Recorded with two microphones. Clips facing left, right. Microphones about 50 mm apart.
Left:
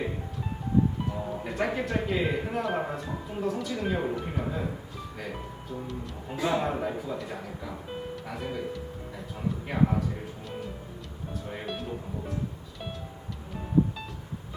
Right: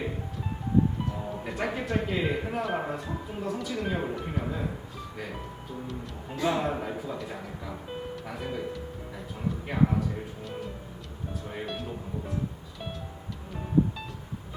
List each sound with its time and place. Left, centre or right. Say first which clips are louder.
1.3 s speech: left 3 dB; centre
5.9 s speech: left 1 dB; centre
11.4 s music: even; centre